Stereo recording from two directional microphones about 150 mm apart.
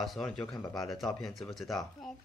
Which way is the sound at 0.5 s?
25° left (ahead or behind).